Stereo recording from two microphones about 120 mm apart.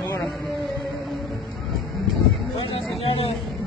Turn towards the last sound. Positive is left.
turn(degrees=55)  # may be behind; listen again after turning